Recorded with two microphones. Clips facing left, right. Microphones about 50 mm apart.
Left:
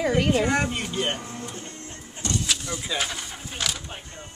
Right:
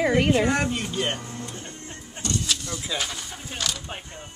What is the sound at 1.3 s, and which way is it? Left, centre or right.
Music, centre.